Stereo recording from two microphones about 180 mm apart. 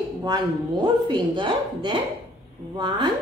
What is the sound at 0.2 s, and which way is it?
Speech, 25° right (ahead or behind).